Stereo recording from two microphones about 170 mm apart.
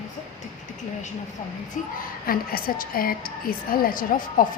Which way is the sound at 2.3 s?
60° left (ahead or behind).